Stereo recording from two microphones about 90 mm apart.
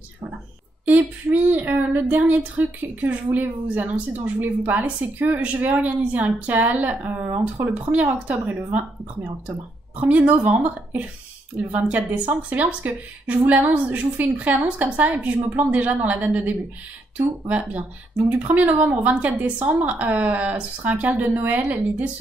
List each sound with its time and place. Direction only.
0.8 s a woman's voice: 15° right (ahead or behind)